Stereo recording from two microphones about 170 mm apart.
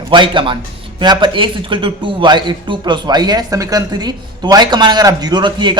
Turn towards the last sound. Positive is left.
turn(degrees=-25)  # may be behind; listen again after turning